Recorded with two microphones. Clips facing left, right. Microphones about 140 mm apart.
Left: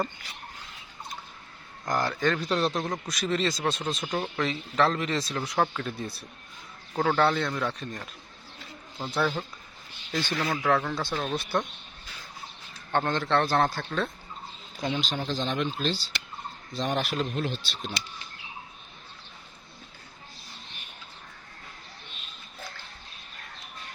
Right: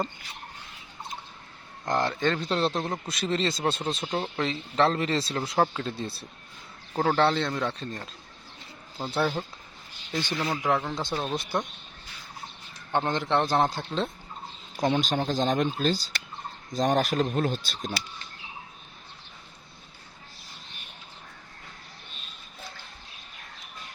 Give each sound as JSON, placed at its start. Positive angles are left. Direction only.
{"t": 1.8, "sound": "speech", "side_deg": -25}
{"t": 9.0, "sound": "speech", "side_deg": -35}
{"t": 10.2, "sound": "a man's voice", "side_deg": -15}
{"t": 12.9, "sound": "a man's voice", "side_deg": -15}
{"t": 14.8, "sound": "speech", "side_deg": -50}